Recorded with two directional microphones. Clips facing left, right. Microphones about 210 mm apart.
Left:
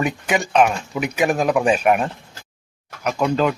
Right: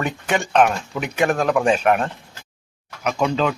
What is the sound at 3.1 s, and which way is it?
Speech, 5° left (ahead or behind).